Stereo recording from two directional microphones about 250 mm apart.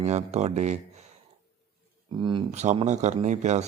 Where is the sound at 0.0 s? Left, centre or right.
Right.